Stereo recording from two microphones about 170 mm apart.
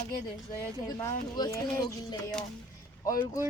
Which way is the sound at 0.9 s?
20° left (ahead or behind).